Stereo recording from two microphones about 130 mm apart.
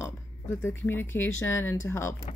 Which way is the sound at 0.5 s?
20° left (ahead or behind).